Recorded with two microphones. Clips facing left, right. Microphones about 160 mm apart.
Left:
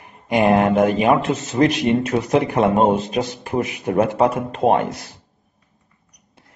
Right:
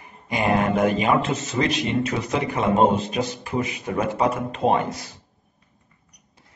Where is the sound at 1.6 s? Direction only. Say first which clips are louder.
Left 7 dB; 55° left (ahead or behind).